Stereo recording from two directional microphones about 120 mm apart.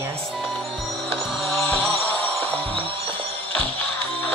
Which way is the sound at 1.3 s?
Centre (ahead or behind).